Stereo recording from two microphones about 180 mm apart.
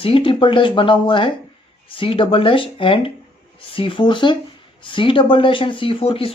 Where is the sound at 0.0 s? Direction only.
30° left (ahead or behind).